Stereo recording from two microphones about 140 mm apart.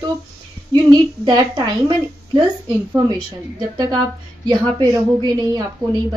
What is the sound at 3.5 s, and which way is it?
Speech, 25° right (ahead or behind).